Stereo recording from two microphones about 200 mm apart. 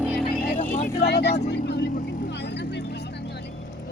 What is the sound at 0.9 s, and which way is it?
Speech, 55° left (ahead or behind).